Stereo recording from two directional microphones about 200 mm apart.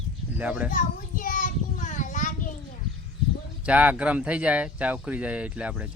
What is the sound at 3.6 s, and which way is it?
Speech, 5° right (ahead or behind).